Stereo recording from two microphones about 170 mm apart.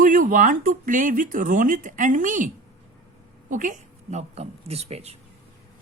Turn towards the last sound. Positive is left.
turn(degrees=-40)  # may be behind; listen again after turning